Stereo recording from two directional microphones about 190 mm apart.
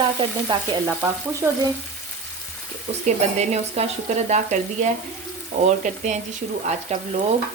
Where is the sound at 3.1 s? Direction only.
35° right (ahead or behind).